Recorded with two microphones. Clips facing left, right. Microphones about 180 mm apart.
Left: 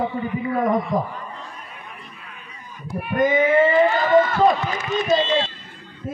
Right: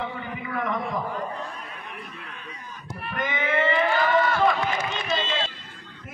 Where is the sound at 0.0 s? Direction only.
35° left (ahead or behind).